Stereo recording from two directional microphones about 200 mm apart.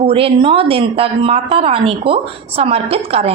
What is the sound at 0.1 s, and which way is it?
A woman's voice, 25° right (ahead or behind).